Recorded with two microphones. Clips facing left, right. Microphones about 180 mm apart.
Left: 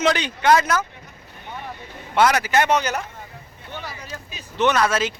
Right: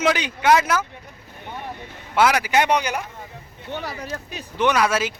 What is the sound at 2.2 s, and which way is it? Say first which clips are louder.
Speech: even; 10° right (ahead or behind).